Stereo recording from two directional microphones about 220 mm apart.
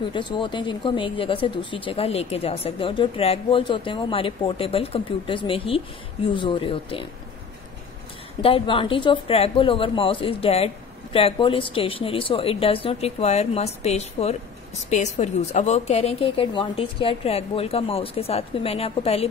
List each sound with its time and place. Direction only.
0.0 s a woman's voice: 20° left (ahead or behind)
8.4 s a woman's voice: 25° left (ahead or behind)